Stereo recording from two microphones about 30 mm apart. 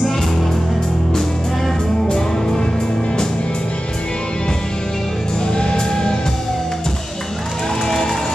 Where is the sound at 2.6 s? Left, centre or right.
Left.